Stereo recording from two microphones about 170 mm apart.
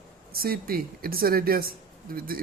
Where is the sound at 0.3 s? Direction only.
60° right (ahead or behind).